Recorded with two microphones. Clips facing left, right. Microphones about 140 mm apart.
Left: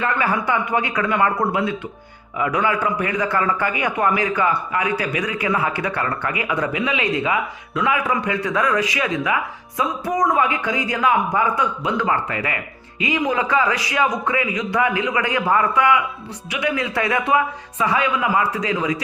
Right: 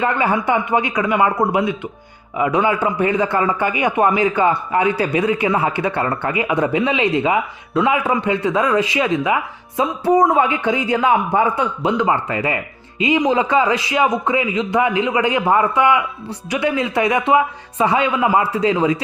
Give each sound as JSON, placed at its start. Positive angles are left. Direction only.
{"t": 0.0, "sound": "a man's voice", "side_deg": -20}